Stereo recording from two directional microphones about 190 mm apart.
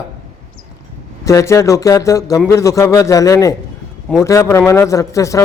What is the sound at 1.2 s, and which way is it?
Speech, 15° left (ahead or behind).